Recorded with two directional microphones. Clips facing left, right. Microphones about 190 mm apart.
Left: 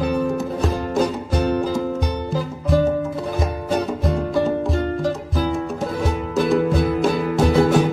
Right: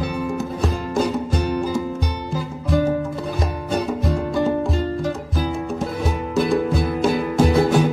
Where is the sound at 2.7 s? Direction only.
Centre (ahead or behind).